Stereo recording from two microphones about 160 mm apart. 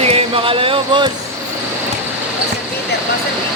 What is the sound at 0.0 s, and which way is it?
Speech, 40° right (ahead or behind).